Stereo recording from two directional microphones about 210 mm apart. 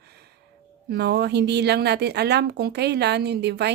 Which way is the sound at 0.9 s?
50° right (ahead or behind).